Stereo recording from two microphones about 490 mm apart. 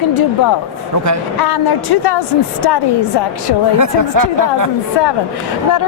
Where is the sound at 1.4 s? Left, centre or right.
Left.